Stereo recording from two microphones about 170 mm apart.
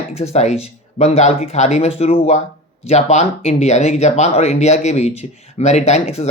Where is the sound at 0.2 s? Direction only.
40° left (ahead or behind).